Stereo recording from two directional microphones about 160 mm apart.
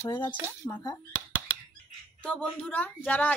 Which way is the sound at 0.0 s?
25° left (ahead or behind).